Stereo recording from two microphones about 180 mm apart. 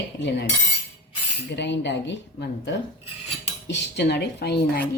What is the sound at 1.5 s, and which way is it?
A woman's voice, 75° left (ahead or behind).